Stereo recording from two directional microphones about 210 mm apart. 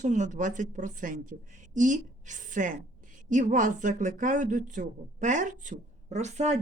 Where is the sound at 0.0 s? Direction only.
35° right (ahead or behind).